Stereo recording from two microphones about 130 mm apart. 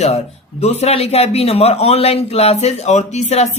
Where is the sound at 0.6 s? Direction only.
55° left (ahead or behind).